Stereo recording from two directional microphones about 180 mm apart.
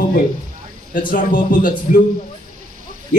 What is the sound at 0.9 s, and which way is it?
Speech, 50° left (ahead or behind).